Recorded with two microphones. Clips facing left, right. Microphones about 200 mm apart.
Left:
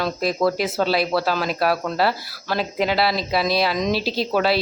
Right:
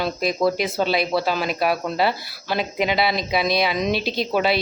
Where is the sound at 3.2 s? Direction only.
20° right (ahead or behind).